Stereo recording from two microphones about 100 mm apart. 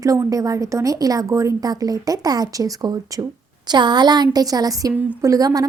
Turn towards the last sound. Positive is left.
turn(degrees=-35)  # may be behind; listen again after turning